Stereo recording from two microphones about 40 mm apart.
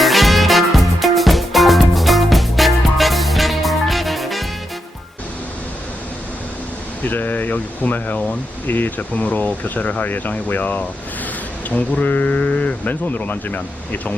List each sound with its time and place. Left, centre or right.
0.0 s music: centre
7.0 s speech: left